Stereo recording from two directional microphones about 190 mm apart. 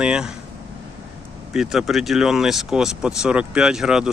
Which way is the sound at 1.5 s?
Centre (ahead or behind).